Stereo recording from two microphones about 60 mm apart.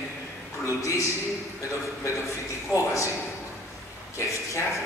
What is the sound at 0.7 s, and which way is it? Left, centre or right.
Speech, left.